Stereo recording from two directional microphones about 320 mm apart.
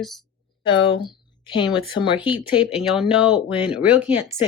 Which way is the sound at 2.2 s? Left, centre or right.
Centre.